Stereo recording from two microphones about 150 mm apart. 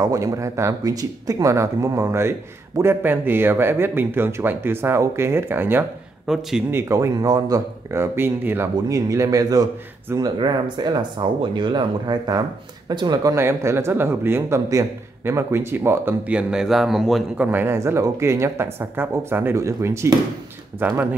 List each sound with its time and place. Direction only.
0.0 s a man's voice: 20° right (ahead or behind)
6.2 s a man's voice: 5° right (ahead or behind)
6.7 s a man's voice: 20° right (ahead or behind); by 17.5 s centre (ahead or behind)
17.5 s speech: 15° right (ahead or behind)